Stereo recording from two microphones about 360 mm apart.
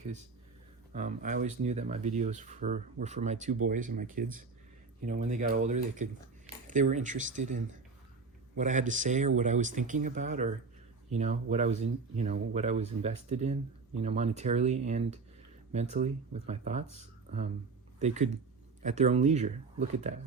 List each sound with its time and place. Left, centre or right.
0.9 s speech: right
18.0 s speech: centre